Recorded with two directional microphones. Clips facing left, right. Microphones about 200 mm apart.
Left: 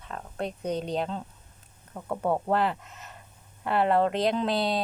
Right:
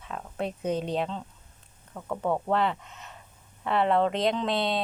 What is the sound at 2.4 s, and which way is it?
Speech, 5° left (ahead or behind).